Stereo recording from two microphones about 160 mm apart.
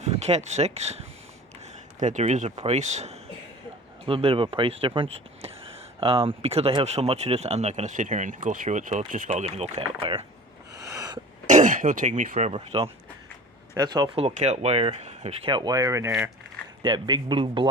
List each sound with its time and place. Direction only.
0.0 s speech: 45° right (ahead or behind)
10.8 s a sound: 20° right (ahead or behind)
11.4 s speech: 50° right (ahead or behind)
12.5 s speech: 35° right (ahead or behind)
15.4 s speech: 25° right (ahead or behind)